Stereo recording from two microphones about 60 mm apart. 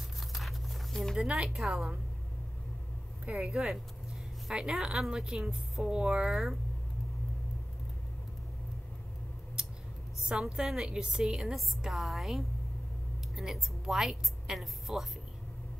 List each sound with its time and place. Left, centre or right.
0.3 s a sound: centre
1.1 s a woman's voice: centre
3.3 s a woman's voice: centre
5.9 s a woman's voice: centre
6.3 s a woman's voice: centre
9.6 s scissors: centre
10.2 s a woman's voice: centre